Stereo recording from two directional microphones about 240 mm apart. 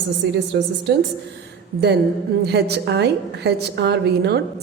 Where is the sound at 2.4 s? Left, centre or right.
Right.